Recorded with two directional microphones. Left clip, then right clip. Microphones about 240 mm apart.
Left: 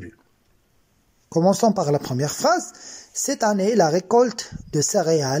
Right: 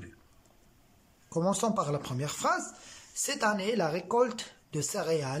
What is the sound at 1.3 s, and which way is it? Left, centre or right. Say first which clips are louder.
Speech: left 11 dB; left.